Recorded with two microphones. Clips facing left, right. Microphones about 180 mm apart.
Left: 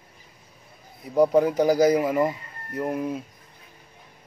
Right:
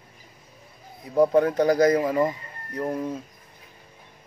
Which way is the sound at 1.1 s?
10° left (ahead or behind).